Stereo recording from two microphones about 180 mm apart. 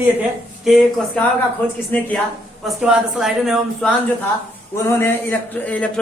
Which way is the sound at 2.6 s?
5° right (ahead or behind).